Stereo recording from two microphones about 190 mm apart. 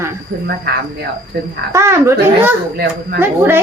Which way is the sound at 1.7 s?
15° right (ahead or behind).